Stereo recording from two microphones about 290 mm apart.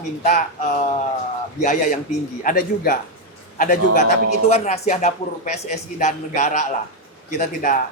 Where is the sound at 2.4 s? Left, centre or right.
Left.